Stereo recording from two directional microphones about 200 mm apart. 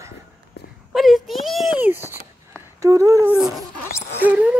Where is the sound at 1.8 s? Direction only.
10° right (ahead or behind).